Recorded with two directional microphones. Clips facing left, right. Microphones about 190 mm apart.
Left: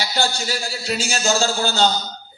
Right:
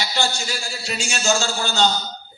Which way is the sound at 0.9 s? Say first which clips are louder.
Left 1 dB; 40° left (ahead or behind).